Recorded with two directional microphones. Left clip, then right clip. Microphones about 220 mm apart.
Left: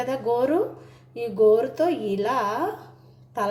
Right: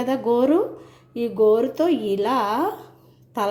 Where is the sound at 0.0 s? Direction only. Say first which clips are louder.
Right 3 dB; 20° right (ahead or behind).